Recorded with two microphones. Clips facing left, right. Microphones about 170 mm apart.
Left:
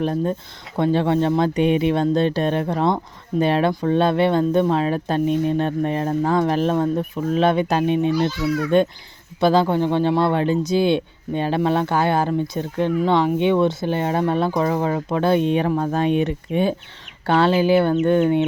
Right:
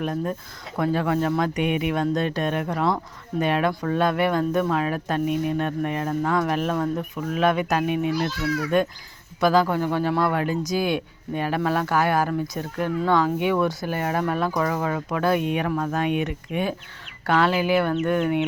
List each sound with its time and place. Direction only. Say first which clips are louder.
0.0 s speech: left 5 dB; 30° left (ahead or behind)